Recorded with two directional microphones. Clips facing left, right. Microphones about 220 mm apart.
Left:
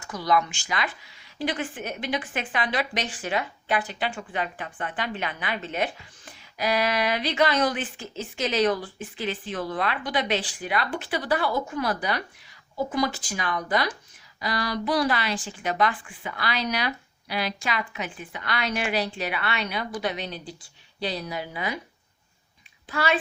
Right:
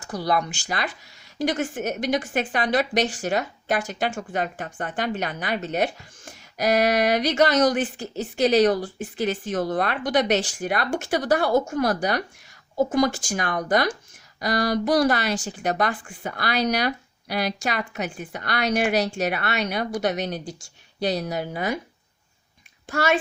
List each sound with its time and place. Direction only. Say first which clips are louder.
0.1 s a woman's voice: even; 35° right (ahead or behind)
22.9 s a woman's voice: right 3 dB; 45° right (ahead or behind)